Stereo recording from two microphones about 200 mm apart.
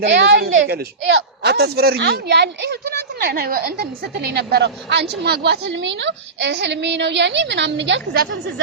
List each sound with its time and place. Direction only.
0.0 s a woman's voice: 60° right (ahead or behind)